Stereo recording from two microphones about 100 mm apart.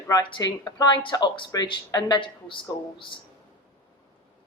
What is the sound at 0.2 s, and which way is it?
Speech, 55° left (ahead or behind).